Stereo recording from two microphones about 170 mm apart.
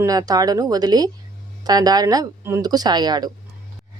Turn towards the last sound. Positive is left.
turn(degrees=-25)  # may be behind; listen again after turning